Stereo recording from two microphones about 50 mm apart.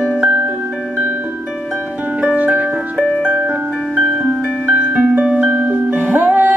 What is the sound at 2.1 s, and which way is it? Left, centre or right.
Music, right.